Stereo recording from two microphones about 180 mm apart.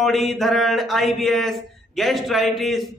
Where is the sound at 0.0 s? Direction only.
Centre (ahead or behind).